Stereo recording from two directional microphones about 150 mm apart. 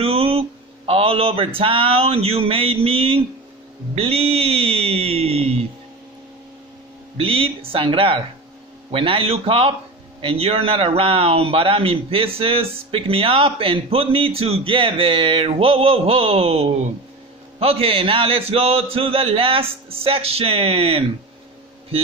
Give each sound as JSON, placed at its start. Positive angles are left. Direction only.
{"t": 0.0, "sound": "a sound", "side_deg": -40}
{"t": 3.9, "sound": "a man's voice", "side_deg": -40}
{"t": 7.2, "sound": "a man's voice", "side_deg": -40}